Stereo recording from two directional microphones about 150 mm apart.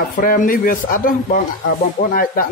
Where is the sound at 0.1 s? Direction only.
70° left (ahead or behind).